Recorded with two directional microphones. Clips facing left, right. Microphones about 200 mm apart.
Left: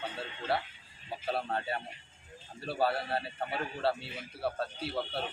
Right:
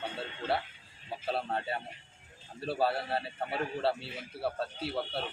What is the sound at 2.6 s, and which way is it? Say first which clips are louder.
A man's voice: right 1 dB; centre (ahead or behind).